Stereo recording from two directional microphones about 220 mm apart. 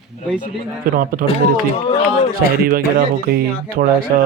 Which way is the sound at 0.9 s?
40° right (ahead or behind).